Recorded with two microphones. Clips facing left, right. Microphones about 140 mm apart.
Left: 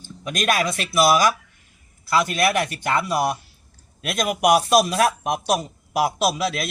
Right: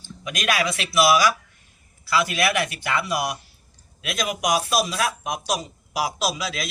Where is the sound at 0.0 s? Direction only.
45° left (ahead or behind).